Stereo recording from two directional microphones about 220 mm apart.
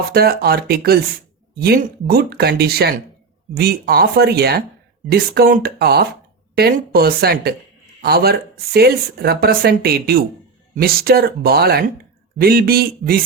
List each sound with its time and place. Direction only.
0.1 s speech: 45° right (ahead or behind)